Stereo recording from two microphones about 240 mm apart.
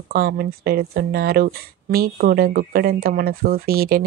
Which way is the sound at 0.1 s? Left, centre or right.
Right.